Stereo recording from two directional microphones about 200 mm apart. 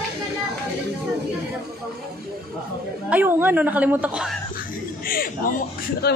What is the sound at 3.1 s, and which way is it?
A woman's voice, 10° right (ahead or behind).